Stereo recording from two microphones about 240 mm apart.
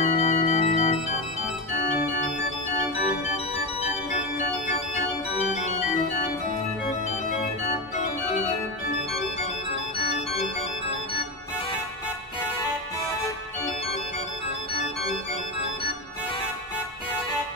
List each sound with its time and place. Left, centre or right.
0.0 s organ: left